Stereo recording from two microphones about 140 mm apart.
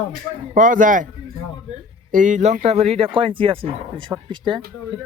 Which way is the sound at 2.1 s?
65° right (ahead or behind).